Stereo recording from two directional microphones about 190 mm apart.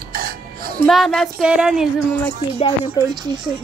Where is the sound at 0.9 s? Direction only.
Centre (ahead or behind).